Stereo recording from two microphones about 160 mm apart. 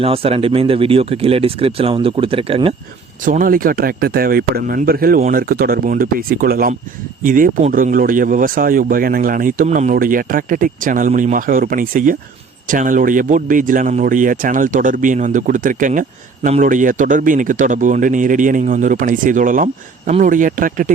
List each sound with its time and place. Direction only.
0.0 s speech: 35° right (ahead or behind)
3.2 s speech: 60° right (ahead or behind)